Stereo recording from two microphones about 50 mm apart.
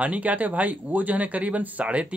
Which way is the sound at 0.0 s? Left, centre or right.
Right.